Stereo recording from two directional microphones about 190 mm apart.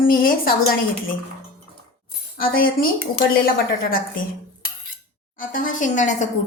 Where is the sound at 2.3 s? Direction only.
50° left (ahead or behind).